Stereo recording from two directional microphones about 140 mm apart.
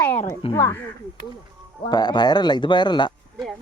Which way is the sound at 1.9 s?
30° left (ahead or behind).